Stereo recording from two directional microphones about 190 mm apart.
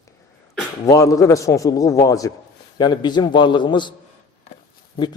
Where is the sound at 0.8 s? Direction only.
15° left (ahead or behind).